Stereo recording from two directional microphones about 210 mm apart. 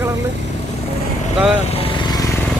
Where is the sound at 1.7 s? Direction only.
25° left (ahead or behind).